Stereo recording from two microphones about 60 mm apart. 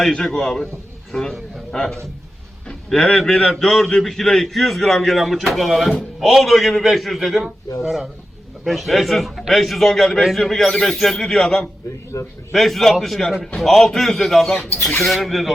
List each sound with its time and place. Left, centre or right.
0.0 s speech: centre
2.6 s a man's voice: centre
12.1 s a man's voice: left
12.5 s a man's voice: centre